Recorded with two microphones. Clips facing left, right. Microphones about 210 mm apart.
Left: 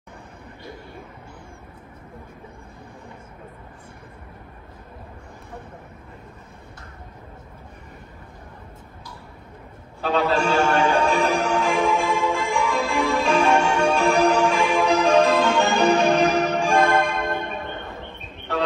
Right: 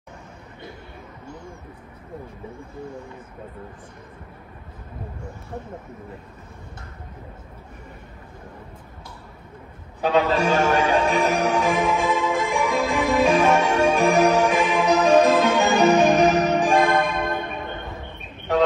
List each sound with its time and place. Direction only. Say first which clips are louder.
10.0 s a man's voice: right 2 dB; 15° right (ahead or behind)
10.9 s music: even; 15° right (ahead or behind)